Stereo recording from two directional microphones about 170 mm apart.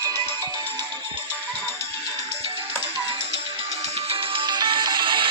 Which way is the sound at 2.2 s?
30° right (ahead or behind).